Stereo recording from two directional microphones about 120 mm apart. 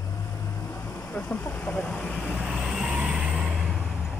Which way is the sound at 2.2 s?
5° right (ahead or behind).